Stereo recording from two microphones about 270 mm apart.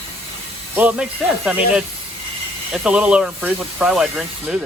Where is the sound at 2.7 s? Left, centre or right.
Centre.